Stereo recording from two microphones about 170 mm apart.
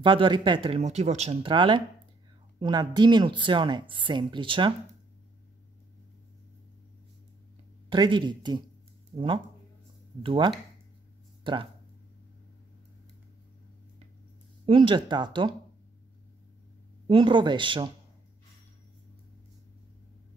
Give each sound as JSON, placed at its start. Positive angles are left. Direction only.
{"t": 0.0, "sound": "speech", "side_deg": -30}
{"t": 7.9, "sound": "speech", "side_deg": -25}
{"t": 14.7, "sound": "speech", "side_deg": -30}
{"t": 17.1, "sound": "speech", "side_deg": -30}